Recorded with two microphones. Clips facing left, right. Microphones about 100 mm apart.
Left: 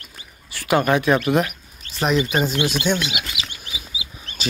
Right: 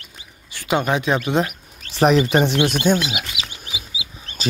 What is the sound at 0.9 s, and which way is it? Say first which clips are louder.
Speech: left 2 dB; 15° right (ahead or behind).